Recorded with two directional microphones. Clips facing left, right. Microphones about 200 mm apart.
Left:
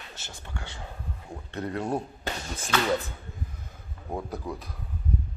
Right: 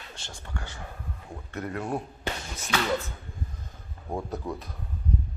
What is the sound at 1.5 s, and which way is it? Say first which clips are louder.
Speech: left 2 dB; 30° left (ahead or behind).